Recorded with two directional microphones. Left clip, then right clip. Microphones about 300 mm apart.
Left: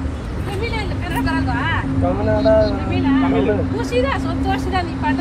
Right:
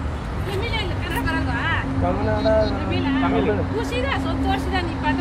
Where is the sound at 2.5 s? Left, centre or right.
Centre.